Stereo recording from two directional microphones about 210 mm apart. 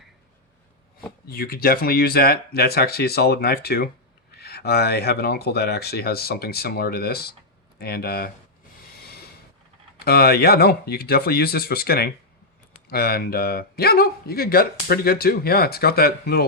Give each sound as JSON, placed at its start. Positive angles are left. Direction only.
{"t": 1.3, "sound": "speech", "side_deg": 45}
{"t": 10.0, "sound": "speech", "side_deg": 50}